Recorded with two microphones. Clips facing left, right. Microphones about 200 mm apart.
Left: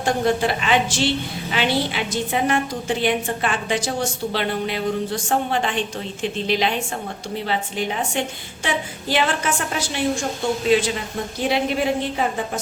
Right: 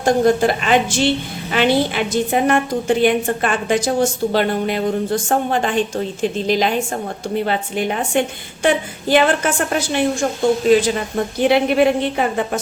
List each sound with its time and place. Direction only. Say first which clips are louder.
0.0 s a woman's voice: right 6 dB; 45° right (ahead or behind)
7.4 s a woman's voice: right 1 dB; 55° right (ahead or behind)
11.4 s speech: right 7 dB; 65° right (ahead or behind)